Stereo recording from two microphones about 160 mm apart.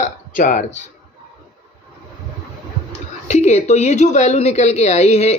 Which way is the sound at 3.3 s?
45° left (ahead or behind).